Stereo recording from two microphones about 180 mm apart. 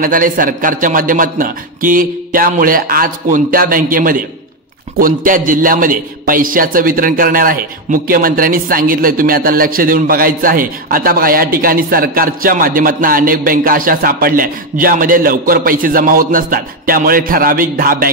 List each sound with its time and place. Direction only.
0.0 s a man's voice: 50° right (ahead or behind)